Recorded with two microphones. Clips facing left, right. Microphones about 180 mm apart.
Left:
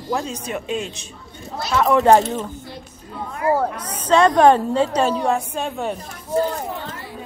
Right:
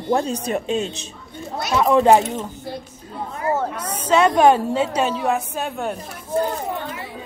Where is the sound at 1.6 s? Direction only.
15° right (ahead or behind).